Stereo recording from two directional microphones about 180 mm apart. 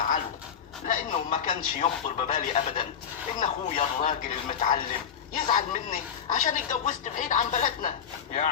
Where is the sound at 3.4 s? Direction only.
40° left (ahead or behind).